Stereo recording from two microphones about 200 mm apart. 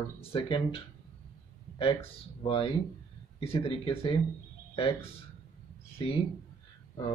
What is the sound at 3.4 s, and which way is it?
Speech, 30° left (ahead or behind).